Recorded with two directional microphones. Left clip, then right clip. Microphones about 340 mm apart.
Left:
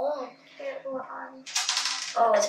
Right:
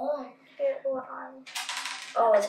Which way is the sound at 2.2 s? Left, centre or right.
Centre.